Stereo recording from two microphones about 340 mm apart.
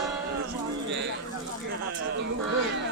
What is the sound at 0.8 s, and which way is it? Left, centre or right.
Bird, right.